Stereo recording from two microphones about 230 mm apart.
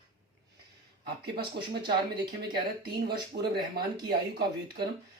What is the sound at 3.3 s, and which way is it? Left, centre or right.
Speech, right.